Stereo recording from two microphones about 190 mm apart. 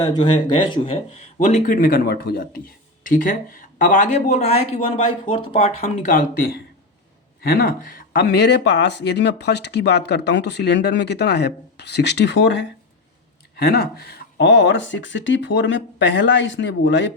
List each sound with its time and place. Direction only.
0.3 s speech: 25° left (ahead or behind)
1.5 s speech: 45° left (ahead or behind); by 12.6 s 65° left (ahead or behind)
13.6 s speech: 55° left (ahead or behind); by 17.1 s 70° left (ahead or behind)